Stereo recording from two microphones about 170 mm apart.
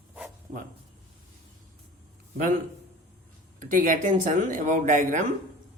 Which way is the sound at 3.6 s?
50° right (ahead or behind).